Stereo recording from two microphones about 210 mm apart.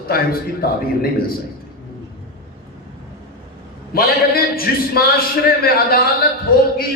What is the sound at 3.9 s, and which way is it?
A man's voice, 45° left (ahead or behind).